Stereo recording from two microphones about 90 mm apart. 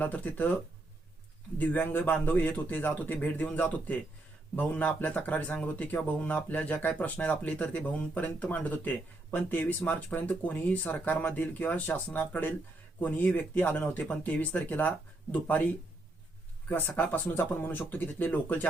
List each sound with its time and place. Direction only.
0.0 s speech: 20° left (ahead or behind)
1.5 s a man's voice: 20° left (ahead or behind)
16.6 s a man's voice: 20° left (ahead or behind)